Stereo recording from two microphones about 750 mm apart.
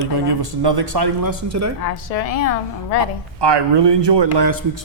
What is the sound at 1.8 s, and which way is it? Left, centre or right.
A woman's voice, left.